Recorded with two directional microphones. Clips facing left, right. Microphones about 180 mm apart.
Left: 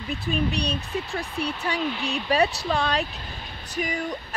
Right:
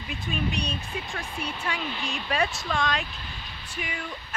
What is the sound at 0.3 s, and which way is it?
Speech, 35° left (ahead or behind).